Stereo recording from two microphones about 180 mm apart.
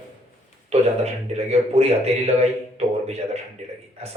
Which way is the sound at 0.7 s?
35° right (ahead or behind).